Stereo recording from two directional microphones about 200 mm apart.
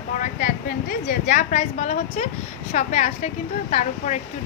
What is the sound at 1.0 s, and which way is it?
A woman's voice, 40° left (ahead or behind).